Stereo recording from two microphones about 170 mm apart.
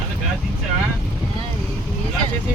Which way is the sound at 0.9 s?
Centre (ahead or behind).